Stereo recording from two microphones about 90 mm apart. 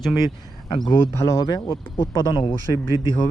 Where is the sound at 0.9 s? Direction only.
25° left (ahead or behind).